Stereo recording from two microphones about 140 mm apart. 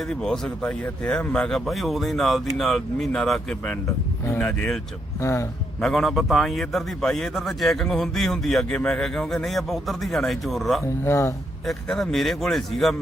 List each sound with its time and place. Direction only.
0.1 s a man's voice: 5° left (ahead or behind)
5.2 s speech: 20° left (ahead or behind)
5.8 s a man's voice: 5° left (ahead or behind)
10.8 s speech: 20° left (ahead or behind)
11.6 s a man's voice: centre (ahead or behind)